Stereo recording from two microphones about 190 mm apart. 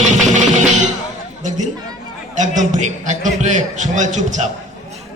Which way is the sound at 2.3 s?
40° right (ahead or behind).